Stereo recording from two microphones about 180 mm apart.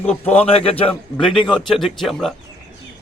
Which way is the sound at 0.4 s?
35° left (ahead or behind).